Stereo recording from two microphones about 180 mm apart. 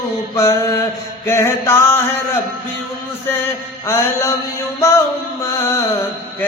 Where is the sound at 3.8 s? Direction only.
15° left (ahead or behind).